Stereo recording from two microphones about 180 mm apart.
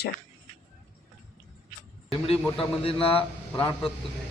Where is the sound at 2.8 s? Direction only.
30° left (ahead or behind).